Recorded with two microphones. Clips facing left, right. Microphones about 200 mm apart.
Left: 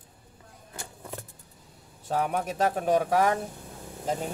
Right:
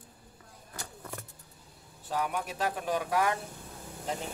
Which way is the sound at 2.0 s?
50° left (ahead or behind).